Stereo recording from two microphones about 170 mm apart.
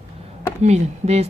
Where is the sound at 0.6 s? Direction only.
40° right (ahead or behind).